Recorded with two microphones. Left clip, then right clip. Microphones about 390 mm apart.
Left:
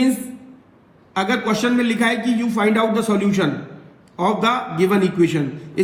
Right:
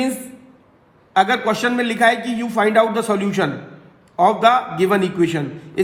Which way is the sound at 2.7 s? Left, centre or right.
Centre.